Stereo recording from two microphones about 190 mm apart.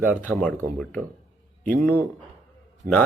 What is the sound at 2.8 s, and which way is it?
Speech, 45° right (ahead or behind).